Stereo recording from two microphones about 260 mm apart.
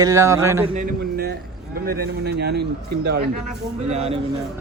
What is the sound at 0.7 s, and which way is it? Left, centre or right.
A man's voice, right.